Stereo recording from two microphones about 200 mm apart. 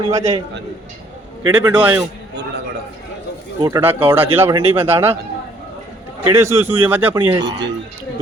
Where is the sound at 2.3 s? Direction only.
60° right (ahead or behind).